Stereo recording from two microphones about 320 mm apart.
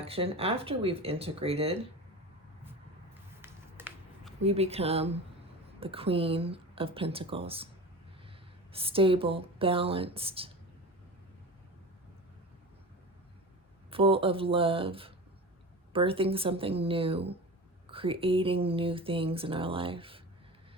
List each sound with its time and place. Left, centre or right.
0.0 s speech: centre
3.4 s a sound: centre
4.4 s speech: centre
8.7 s speech: centre
13.9 s speech: centre